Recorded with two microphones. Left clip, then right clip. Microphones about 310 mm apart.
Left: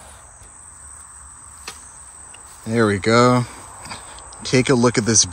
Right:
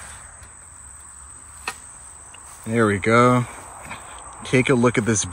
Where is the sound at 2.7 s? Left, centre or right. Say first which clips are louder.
Left 1 dB; centre.